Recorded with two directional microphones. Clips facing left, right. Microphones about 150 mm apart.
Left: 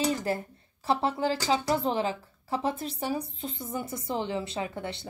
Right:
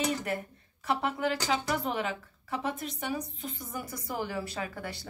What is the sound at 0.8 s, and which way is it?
A woman's voice, 30° left (ahead or behind).